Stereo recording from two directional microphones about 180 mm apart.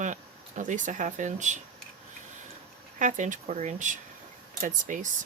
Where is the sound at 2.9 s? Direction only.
45° right (ahead or behind).